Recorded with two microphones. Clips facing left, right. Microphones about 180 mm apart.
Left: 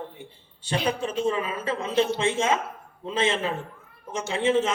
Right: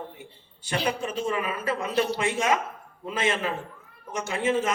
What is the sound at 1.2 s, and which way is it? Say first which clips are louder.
A man's voice: left 2 dB; 25° left (ahead or behind).